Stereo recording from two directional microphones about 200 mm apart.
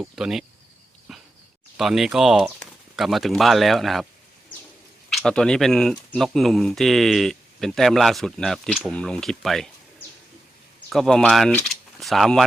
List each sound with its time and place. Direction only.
0.0 s speech: centre (ahead or behind)
1.7 s speech: centre (ahead or behind)
5.0 s speech: centre (ahead or behind)
10.8 s speech: centre (ahead or behind)